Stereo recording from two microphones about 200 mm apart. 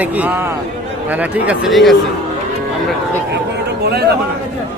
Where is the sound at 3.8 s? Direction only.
55° right (ahead or behind).